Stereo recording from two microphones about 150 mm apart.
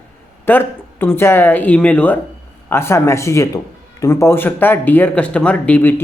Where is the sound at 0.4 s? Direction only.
15° left (ahead or behind).